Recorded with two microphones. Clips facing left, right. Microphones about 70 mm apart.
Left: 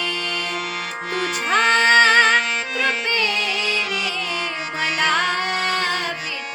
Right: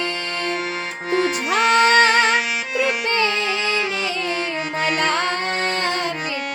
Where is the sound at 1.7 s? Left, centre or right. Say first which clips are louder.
Even; centre.